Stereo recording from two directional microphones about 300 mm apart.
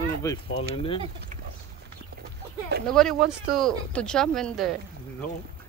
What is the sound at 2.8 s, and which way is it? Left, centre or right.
Speech, centre.